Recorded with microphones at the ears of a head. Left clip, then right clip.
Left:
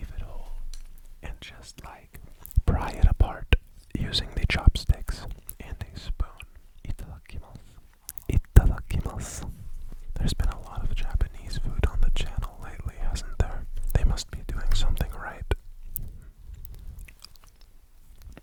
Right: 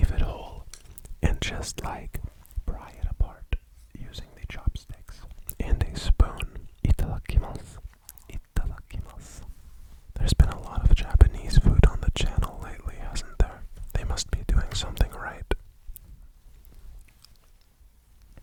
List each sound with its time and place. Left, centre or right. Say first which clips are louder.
0.0 s whispering: right 12 dB; right
2.4 s whispering: left 15 dB; left
5.5 s whispering: right 11 dB; right
8.0 s whispering: left 16 dB; left
10.3 s whispering: right 5 dB; right
12.7 s whispering: right 1 dB; centre